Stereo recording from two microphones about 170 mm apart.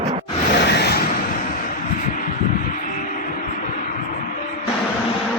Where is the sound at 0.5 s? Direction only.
80° left.